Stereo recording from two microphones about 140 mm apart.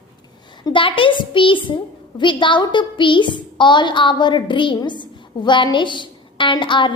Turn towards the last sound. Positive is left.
turn(degrees=35)  # may be behind; listen again after turning